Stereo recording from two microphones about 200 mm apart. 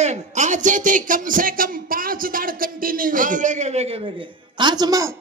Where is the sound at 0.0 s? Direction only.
35° right (ahead or behind).